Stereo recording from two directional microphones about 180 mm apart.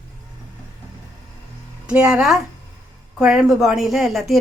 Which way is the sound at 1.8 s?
5° right (ahead or behind).